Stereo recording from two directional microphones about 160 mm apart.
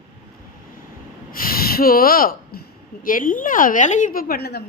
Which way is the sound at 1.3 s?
65° left (ahead or behind).